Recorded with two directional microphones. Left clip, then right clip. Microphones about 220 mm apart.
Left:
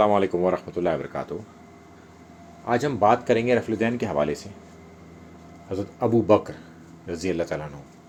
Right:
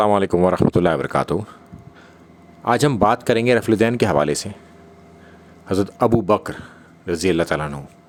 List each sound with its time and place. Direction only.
0.0 s a man's voice: 50° right (ahead or behind)
2.6 s a man's voice: 45° right (ahead or behind)
5.6 s a man's voice: 45° right (ahead or behind)